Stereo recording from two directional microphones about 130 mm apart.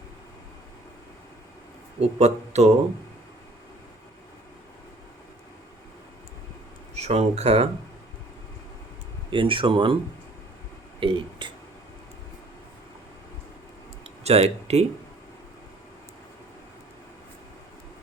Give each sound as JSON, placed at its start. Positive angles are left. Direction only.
{"t": 2.0, "sound": "speech", "side_deg": -55}
{"t": 6.9, "sound": "speech", "side_deg": -60}
{"t": 9.3, "sound": "speech", "side_deg": -40}
{"t": 11.0, "sound": "speech", "side_deg": -40}
{"t": 14.3, "sound": "speech", "side_deg": -55}